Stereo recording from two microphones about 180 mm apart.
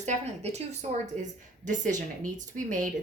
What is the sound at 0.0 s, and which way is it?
A woman's voice, 40° right (ahead or behind).